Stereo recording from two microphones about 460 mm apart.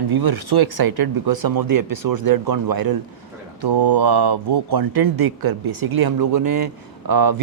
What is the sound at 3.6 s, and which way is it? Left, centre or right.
Speech, right.